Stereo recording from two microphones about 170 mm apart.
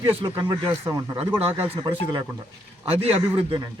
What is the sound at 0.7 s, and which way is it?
Speech, 15° right (ahead or behind).